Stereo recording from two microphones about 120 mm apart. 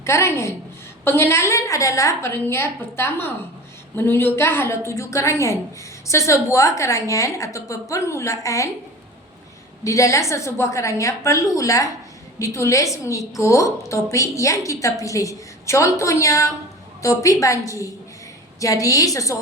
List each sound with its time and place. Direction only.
0.0 s a woman's voice: 25° left (ahead or behind)
9.8 s a woman's voice: 25° left (ahead or behind)